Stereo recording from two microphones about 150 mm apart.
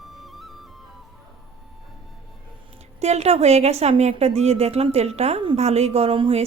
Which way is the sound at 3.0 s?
45° right (ahead or behind).